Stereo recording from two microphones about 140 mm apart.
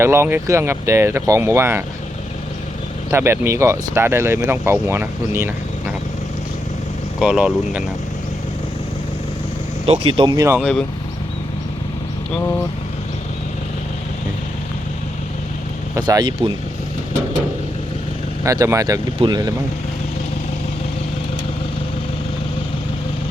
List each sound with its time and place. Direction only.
0.0 s speech: 20° right (ahead or behind)
3.1 s speech: 20° right (ahead or behind)
7.2 s speech: 5° right (ahead or behind)
9.8 s speech: 40° right (ahead or behind)
10.3 s speech: 20° right (ahead or behind)
16.0 s speech: 30° right (ahead or behind)
18.4 s speech: 25° right (ahead or behind)